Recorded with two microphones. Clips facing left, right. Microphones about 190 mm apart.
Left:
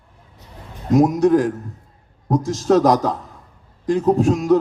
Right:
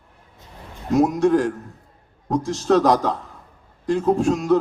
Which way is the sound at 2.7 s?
Centre (ahead or behind).